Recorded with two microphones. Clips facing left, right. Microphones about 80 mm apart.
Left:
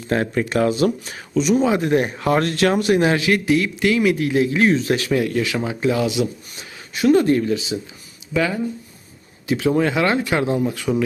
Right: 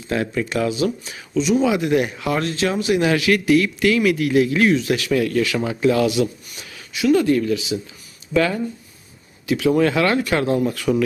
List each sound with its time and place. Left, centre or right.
0.1 s speech: left
3.0 s speech: left
6.9 s speech: left
8.3 s speech: centre
9.5 s speech: left